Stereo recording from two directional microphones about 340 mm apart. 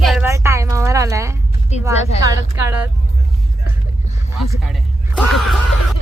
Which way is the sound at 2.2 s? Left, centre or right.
Centre.